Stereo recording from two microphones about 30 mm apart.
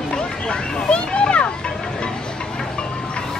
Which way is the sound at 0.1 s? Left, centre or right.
Left.